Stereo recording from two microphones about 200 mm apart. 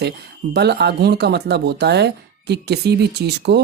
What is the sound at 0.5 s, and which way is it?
Speech, 55° right (ahead or behind).